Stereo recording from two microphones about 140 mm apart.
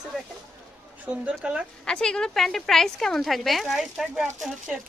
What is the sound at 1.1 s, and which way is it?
Speech, 10° right (ahead or behind).